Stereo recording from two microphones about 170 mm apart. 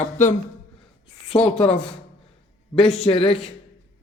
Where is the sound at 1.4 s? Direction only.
35° left (ahead or behind).